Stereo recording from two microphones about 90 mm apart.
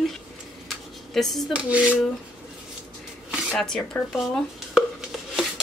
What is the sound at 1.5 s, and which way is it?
Dishes, 15° right (ahead or behind).